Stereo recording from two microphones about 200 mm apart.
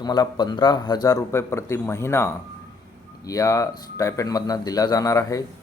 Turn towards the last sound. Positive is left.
turn(degrees=15)  # may be behind; listen again after turning